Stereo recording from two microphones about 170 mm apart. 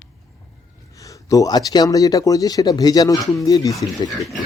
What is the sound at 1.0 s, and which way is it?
Speech, 20° left (ahead or behind).